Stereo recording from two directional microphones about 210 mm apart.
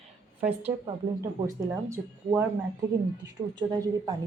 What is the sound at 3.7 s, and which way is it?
Speech, 20° right (ahead or behind).